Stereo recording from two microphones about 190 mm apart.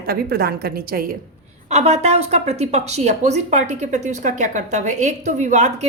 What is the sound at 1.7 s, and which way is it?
A woman's voice, 35° right (ahead or behind).